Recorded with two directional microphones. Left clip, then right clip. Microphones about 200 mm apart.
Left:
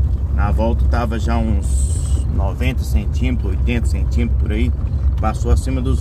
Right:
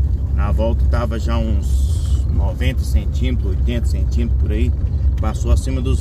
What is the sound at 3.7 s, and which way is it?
Speech, 30° left (ahead or behind).